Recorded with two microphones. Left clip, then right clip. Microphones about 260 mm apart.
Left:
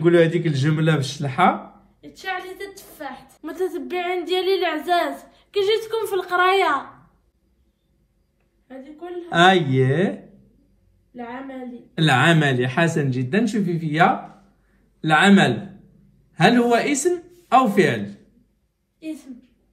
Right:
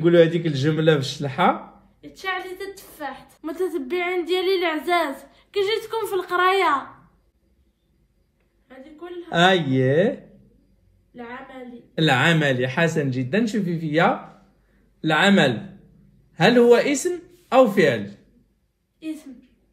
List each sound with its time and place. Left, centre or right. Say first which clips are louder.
0.1 s speech: right 1 dB; left
3.3 s speech: left 1 dB; centre
9.3 s speech: left 2 dB; centre
11.9 s speech: left 1 dB; centre